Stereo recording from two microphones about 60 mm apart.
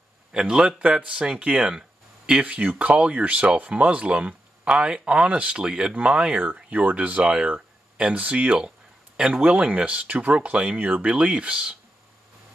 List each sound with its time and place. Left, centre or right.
0.3 s speech: centre
6.3 s speech: right